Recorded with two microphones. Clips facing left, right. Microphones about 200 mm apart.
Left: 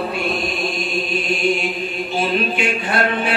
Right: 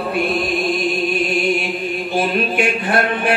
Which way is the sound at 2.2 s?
55° right (ahead or behind).